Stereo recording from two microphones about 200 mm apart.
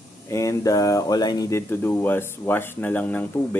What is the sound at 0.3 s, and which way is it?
Speech, 15° left (ahead or behind).